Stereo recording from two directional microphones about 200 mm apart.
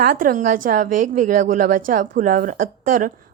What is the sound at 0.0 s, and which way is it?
A woman's voice, 45° right (ahead or behind).